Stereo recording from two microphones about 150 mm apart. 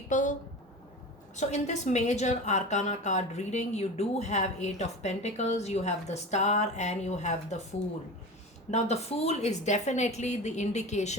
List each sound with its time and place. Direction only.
0.1 s a sound: 55° left (ahead or behind)
1.4 s a woman's voice: 50° left (ahead or behind)
8.7 s a woman's voice: 45° left (ahead or behind)